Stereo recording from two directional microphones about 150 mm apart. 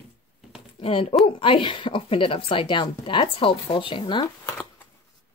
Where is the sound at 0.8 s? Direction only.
40° left (ahead or behind).